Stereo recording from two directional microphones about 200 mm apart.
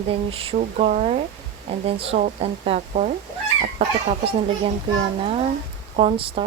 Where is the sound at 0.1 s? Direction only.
30° right (ahead or behind).